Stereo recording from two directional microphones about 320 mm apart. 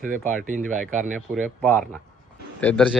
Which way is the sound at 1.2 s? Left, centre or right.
Centre.